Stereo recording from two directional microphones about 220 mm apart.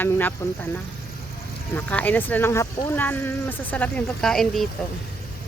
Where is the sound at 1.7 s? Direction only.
5° left (ahead or behind).